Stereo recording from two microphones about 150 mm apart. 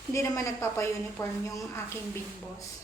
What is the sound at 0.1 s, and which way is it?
A woman's voice, 20° left (ahead or behind).